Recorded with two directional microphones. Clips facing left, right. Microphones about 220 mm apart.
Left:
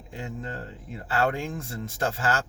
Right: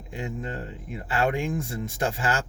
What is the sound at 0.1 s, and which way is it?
Speech, 15° right (ahead or behind).